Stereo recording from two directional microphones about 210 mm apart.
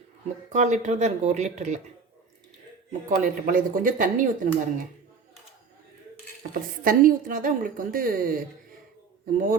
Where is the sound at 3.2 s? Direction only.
40° right (ahead or behind).